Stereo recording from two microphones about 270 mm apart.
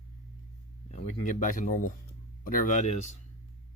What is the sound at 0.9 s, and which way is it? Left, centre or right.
Speech, left.